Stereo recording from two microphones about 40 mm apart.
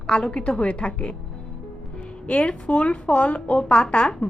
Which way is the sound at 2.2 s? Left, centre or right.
Left.